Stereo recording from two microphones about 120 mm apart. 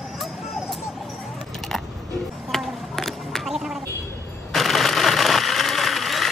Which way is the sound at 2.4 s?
Centre (ahead or behind).